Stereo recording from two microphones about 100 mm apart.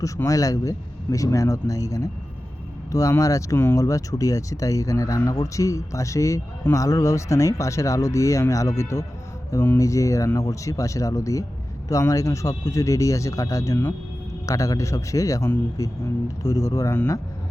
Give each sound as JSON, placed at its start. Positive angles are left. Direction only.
{"t": 0.0, "sound": "speech", "side_deg": 35}